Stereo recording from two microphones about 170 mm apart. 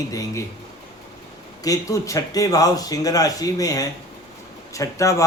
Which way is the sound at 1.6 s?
20° left (ahead or behind).